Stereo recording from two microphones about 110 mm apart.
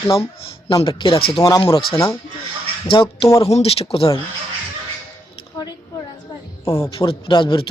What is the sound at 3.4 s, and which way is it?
Speech, 65° left (ahead or behind).